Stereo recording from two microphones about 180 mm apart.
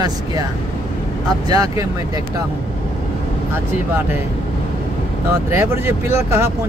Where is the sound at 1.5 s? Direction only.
20° right (ahead or behind).